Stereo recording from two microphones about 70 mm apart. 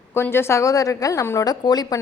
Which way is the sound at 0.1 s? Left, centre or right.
Left.